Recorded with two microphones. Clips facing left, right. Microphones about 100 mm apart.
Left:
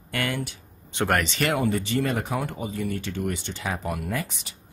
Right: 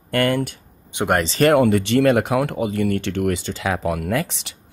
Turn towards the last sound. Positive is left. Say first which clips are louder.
# right 8 dB
turn(degrees=-85)